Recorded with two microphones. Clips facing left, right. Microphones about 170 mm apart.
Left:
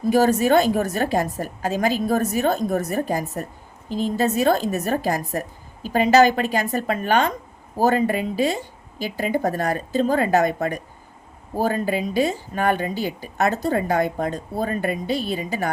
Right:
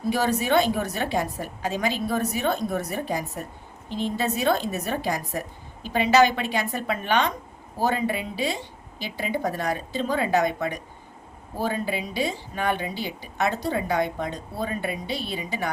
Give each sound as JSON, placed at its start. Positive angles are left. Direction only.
{"t": 0.0, "sound": "speech", "side_deg": 45}